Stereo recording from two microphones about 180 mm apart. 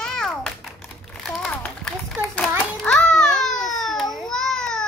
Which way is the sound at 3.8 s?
Centre (ahead or behind).